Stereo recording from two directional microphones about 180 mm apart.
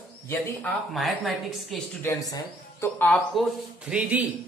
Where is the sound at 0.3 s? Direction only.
10° left (ahead or behind).